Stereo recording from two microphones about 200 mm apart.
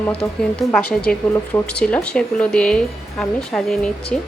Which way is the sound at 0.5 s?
5° left (ahead or behind).